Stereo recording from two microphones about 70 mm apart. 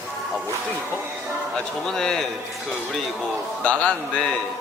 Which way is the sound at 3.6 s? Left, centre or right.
Centre.